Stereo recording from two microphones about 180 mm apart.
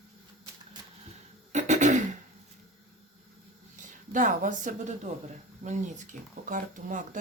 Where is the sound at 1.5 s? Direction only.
40° right (ahead or behind).